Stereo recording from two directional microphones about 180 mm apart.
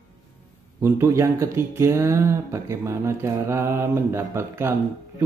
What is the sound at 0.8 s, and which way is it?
Speech, 15° right (ahead or behind).